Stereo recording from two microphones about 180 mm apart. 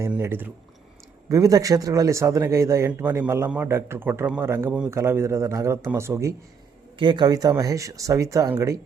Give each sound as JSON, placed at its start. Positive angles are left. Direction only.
{"t": 0.0, "sound": "speech", "side_deg": -15}